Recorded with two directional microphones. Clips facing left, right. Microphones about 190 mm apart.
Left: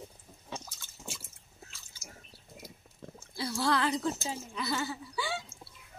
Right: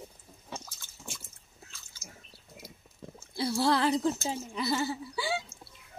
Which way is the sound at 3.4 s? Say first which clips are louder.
Right 3 dB; 30° right (ahead or behind).